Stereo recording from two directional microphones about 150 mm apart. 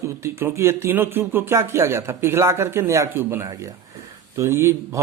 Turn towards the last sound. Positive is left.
turn(degrees=-15)  # may be behind; listen again after turning